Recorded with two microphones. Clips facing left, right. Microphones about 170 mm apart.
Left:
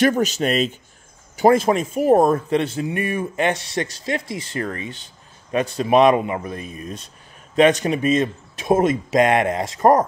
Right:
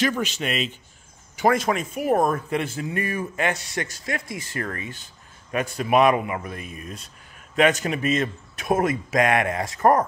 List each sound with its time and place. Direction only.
0.0 s speech: 45° left (ahead or behind)
1.4 s speech: 30° left (ahead or behind)